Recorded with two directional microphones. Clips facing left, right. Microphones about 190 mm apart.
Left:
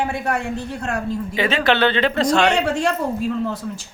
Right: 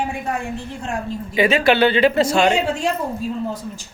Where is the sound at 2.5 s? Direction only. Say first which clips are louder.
Left 1 dB; 70° left (ahead or behind).